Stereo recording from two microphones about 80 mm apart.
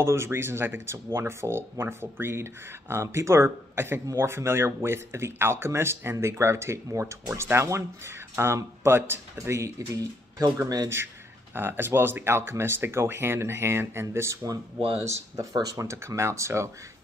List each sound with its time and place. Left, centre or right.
0.0 s speech: right
11.5 s speech: right
15.5 s speech: right